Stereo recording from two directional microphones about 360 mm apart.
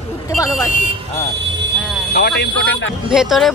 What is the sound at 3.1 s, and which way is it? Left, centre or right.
Speech, centre.